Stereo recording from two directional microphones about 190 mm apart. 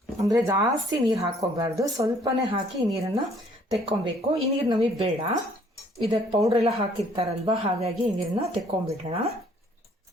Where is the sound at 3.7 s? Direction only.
25° right (ahead or behind).